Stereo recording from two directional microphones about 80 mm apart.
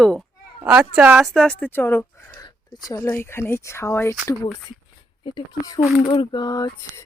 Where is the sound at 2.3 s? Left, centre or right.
Left.